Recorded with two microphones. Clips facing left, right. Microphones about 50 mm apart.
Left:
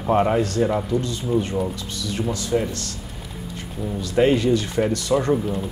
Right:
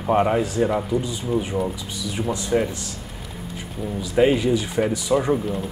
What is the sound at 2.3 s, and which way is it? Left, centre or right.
Speech, right.